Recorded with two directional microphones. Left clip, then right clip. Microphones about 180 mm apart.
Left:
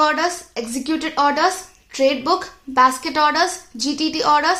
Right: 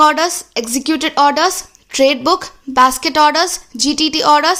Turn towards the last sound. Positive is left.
turn(degrees=-45)  # may be behind; listen again after turning